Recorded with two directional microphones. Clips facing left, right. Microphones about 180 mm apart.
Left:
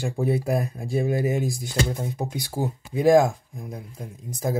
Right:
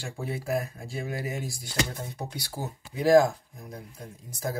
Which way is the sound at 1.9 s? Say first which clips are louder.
Left 8 dB; 20° left (ahead or behind).